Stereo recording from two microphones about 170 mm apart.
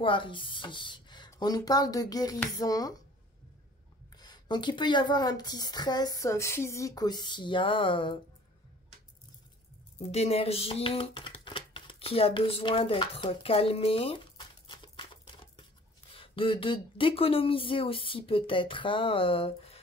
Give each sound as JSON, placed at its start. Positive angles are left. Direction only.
{"t": 0.0, "sound": "speech", "side_deg": 30}
{"t": 4.2, "sound": "speech", "side_deg": 25}
{"t": 9.9, "sound": "speech", "side_deg": 40}
{"t": 16.1, "sound": "speech", "side_deg": 30}